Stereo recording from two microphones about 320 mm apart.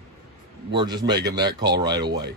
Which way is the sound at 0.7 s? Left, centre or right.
Centre.